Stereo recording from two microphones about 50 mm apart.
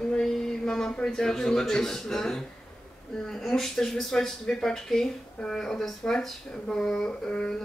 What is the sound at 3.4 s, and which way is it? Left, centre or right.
Speech, centre.